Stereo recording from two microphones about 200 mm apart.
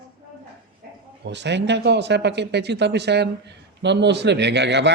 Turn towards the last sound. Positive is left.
turn(degrees=-60)  # may be behind; listen again after turning